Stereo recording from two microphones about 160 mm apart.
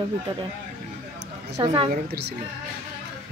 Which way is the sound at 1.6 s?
30° right (ahead or behind).